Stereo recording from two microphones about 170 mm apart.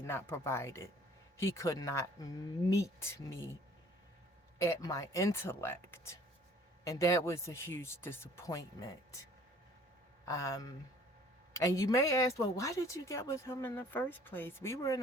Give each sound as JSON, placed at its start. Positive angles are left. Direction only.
{"t": 0.0, "sound": "speech", "side_deg": 15}
{"t": 4.5, "sound": "speech", "side_deg": 15}
{"t": 10.2, "sound": "speech", "side_deg": 15}